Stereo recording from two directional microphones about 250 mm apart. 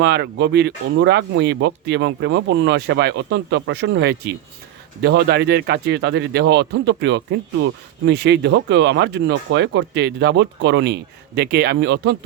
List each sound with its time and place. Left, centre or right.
0.0 s speech: right